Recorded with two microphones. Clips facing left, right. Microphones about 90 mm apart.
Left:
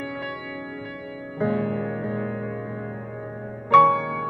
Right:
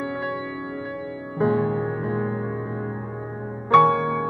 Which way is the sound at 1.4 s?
25° right (ahead or behind).